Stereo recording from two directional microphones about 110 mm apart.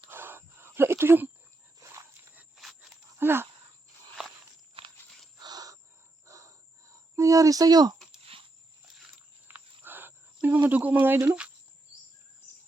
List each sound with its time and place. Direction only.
0.1 s a sound: 20° right (ahead or behind)
2.6 s dog: centre (ahead or behind)
3.2 s speech: 20° right (ahead or behind)
5.4 s bird: 35° right (ahead or behind)
6.2 s a sound: 30° right (ahead or behind)
7.9 s a sound: centre (ahead or behind)
8.2 s horse: 60° right (ahead or behind)
9.5 s wild animals: 15° right (ahead or behind)
10.7 s speech: 15° right (ahead or behind)